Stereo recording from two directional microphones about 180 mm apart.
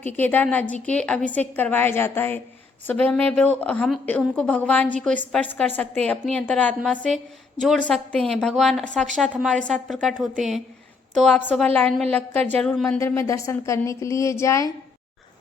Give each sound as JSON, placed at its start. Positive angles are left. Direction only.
{"t": 0.0, "sound": "a woman's voice", "side_deg": 10}
{"t": 13.0, "sound": "a woman's voice", "side_deg": 15}